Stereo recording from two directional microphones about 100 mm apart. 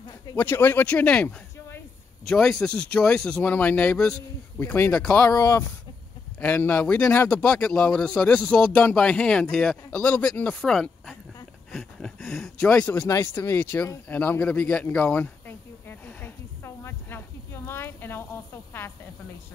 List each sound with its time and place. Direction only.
0.4 s speech: 20° left (ahead or behind)
4.6 s speech: 25° left (ahead or behind)
5.3 s speech: 30° left (ahead or behind)
6.4 s speech: 20° left (ahead or behind)
10.6 s speech: centre (ahead or behind)
13.1 s speech: 25° left (ahead or behind)
14.0 s a sound: 20° left (ahead or behind)